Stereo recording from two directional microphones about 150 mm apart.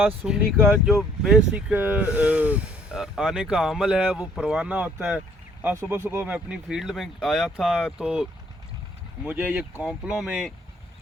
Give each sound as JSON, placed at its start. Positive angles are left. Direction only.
{"t": 0.3, "sound": "speech", "side_deg": -15}
{"t": 0.9, "sound": "speech", "side_deg": -5}